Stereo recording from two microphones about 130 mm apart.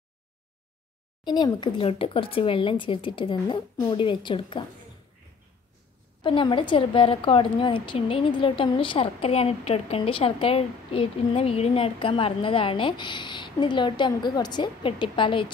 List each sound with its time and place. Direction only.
1.2 s a woman's voice: 35° left (ahead or behind)
6.2 s a woman's voice: 40° left (ahead or behind)